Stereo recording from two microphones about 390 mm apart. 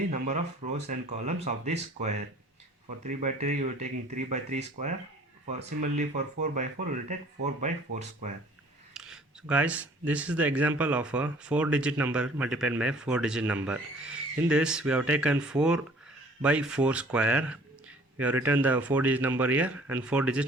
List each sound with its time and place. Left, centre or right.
0.1 s speech: centre
8.9 s speech: centre